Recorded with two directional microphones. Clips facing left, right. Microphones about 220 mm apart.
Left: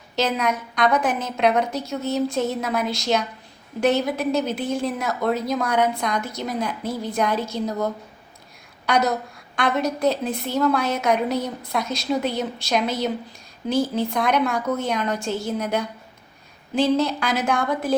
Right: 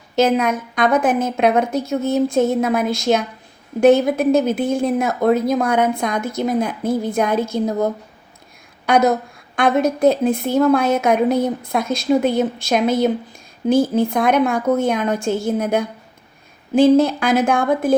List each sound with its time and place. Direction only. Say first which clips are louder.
0.2 s a woman's voice: right 7 dB; 50° right (ahead or behind)
8.9 s a woman's voice: right 6 dB; 50° right (ahead or behind)